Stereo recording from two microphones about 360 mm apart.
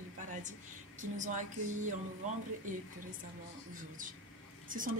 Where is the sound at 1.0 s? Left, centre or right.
Right.